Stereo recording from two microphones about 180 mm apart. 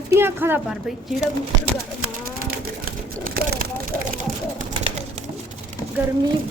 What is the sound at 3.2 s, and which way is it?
Speech, 55° right (ahead or behind).